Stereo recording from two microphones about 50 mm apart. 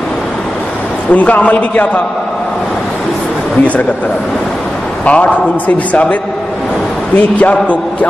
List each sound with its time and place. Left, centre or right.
1.1 s a man's voice: left
5.0 s a man's voice: left
7.2 s a man's voice: left